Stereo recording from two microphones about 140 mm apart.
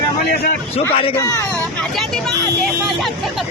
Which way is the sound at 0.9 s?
45° left (ahead or behind).